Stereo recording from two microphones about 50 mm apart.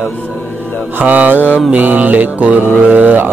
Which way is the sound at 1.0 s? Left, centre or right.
Right.